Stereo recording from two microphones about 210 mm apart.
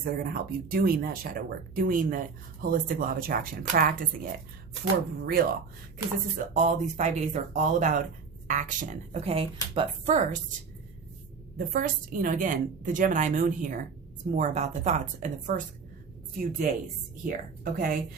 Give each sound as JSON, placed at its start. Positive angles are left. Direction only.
{"t": 0.0, "sound": "a woman's voice", "side_deg": -45}
{"t": 11.5, "sound": "a woman's voice", "side_deg": -40}